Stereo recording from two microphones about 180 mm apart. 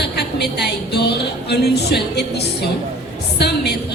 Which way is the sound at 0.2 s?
65° left (ahead or behind).